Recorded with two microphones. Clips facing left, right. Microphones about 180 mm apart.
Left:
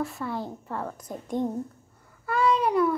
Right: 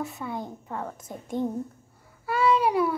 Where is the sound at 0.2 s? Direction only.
20° right (ahead or behind).